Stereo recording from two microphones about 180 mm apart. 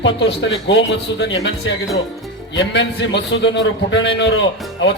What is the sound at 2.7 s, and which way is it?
A man's voice, 85° left.